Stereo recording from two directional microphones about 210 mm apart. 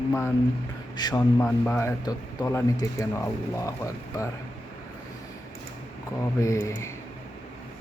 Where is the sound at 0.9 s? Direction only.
15° left (ahead or behind).